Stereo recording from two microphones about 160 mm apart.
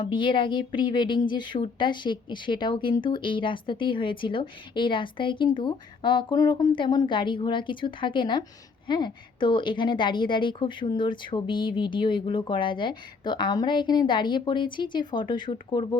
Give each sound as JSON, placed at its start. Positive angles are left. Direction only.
{"t": 0.0, "sound": "a woman's voice", "side_deg": 30}